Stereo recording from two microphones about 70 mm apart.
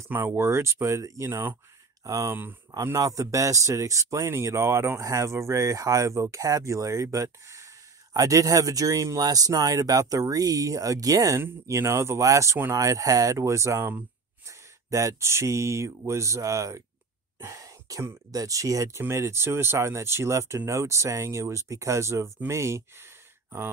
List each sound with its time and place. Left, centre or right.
0.1 s speech: right
2.0 s speech: right
11.3 s speech: right
17.4 s sigh: right
18.3 s speech: right